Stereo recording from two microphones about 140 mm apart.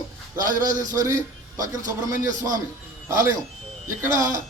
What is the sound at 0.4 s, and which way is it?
A man's voice, 25° right (ahead or behind).